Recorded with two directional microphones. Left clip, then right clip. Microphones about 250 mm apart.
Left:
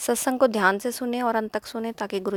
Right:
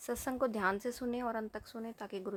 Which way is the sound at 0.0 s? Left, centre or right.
Left.